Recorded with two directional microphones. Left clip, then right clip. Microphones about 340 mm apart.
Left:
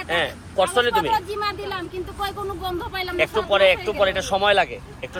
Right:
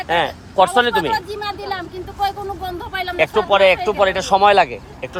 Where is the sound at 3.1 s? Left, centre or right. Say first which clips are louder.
Right 5 dB; right.